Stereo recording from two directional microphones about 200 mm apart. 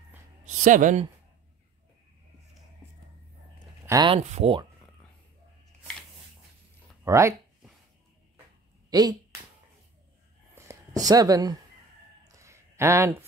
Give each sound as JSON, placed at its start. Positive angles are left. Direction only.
{"t": 0.6, "sound": "speech", "side_deg": -40}
{"t": 3.8, "sound": "speech", "side_deg": -20}
{"t": 4.2, "sound": "speech", "side_deg": -35}
{"t": 7.1, "sound": "speech", "side_deg": -15}
{"t": 8.9, "sound": "speech", "side_deg": -20}
{"t": 10.5, "sound": "a sound", "side_deg": -15}